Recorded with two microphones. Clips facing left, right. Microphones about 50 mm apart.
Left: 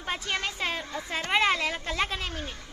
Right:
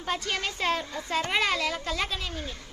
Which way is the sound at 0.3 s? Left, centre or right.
Centre.